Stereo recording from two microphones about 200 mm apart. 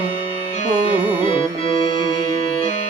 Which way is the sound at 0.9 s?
25° left (ahead or behind).